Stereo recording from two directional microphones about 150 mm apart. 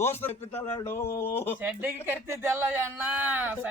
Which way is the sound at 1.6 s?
15° right (ahead or behind).